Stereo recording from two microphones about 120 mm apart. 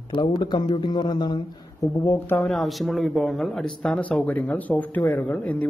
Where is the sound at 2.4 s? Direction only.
Centre (ahead or behind).